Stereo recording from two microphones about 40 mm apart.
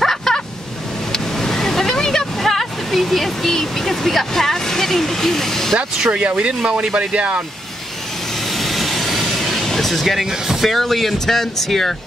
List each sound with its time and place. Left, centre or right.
0.0 s vehicle: centre
1.1 s a sound: centre
6.1 s speech: right
8.5 s vehicle: centre
10.5 s speech: centre